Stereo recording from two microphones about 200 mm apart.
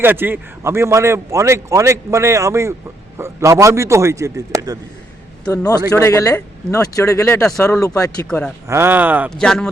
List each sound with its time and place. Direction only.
0.0 s a man's voice: 10° right (ahead or behind)
5.5 s speech: 20° left (ahead or behind)
8.6 s a man's voice: 15° right (ahead or behind)
9.3 s a man's voice: 5° left (ahead or behind)